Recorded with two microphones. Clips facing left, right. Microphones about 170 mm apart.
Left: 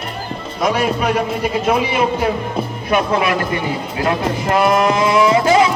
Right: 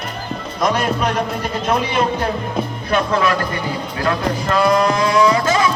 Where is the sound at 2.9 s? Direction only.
20° left (ahead or behind).